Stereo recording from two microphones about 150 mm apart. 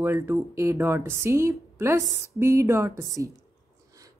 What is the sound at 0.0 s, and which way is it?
Speech, 20° right (ahead or behind).